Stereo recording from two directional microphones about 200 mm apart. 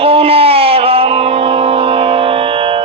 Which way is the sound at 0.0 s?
30° right (ahead or behind).